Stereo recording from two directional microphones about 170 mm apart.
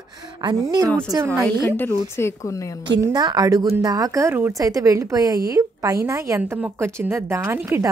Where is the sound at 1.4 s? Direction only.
10° left (ahead or behind).